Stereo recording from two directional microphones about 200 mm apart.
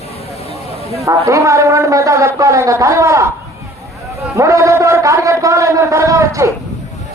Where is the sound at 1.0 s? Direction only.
15° right (ahead or behind).